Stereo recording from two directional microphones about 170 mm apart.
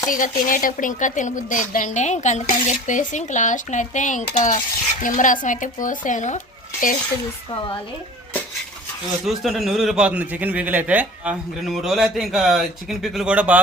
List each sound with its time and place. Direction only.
0.1 s speech: 55° left (ahead or behind)
9.2 s a man's voice: centre (ahead or behind)